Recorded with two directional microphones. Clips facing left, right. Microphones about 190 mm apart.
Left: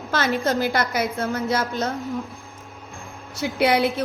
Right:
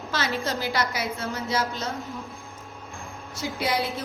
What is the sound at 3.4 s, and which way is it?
Speech, 65° left (ahead or behind).